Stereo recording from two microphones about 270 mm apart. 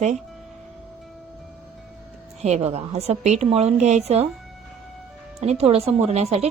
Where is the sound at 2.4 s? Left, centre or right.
Right.